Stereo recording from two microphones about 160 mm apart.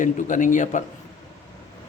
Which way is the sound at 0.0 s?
55° left (ahead or behind).